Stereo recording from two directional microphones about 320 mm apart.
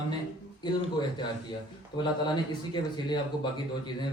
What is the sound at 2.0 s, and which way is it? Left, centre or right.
A man's voice, centre.